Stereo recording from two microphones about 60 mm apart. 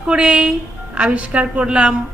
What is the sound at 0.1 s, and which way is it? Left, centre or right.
A woman's voice, centre.